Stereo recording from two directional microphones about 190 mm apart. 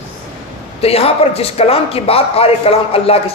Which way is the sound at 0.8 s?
30° left (ahead or behind).